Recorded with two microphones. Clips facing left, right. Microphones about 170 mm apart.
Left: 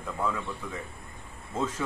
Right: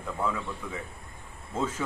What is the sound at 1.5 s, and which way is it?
Speech, 5° right (ahead or behind).